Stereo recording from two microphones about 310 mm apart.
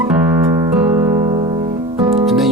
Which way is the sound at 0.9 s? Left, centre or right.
Centre.